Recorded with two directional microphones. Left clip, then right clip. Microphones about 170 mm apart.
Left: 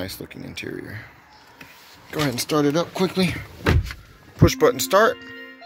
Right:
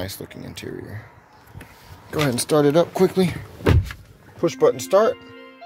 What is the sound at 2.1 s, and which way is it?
Speech, 40° right (ahead or behind).